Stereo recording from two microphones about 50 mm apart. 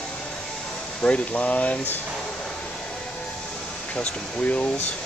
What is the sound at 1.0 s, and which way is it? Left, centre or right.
Speech, left.